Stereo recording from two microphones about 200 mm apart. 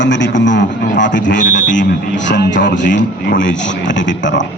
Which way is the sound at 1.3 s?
40° left (ahead or behind).